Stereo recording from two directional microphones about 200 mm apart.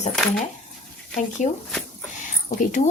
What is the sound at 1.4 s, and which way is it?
Speech, 40° left (ahead or behind).